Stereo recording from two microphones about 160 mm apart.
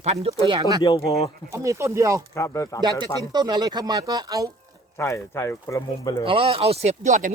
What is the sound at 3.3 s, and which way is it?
Speech, 25° right (ahead or behind).